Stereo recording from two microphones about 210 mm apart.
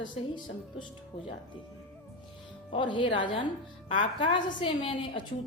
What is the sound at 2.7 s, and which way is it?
A woman's voice, 25° left (ahead or behind).